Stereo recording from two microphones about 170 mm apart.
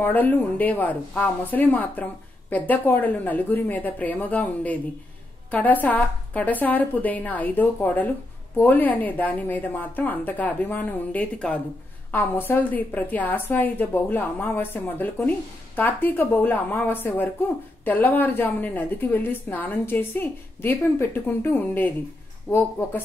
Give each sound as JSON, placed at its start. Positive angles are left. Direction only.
{"t": 0.0, "sound": "a woman's voice", "side_deg": 10}